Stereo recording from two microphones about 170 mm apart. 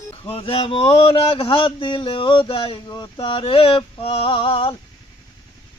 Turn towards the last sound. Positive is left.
turn(degrees=30)  # may be behind; listen again after turning